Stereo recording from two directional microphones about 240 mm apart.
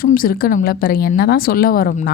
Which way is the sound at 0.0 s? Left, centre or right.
Left.